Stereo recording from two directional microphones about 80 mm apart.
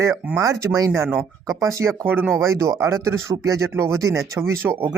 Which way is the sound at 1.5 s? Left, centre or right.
Right.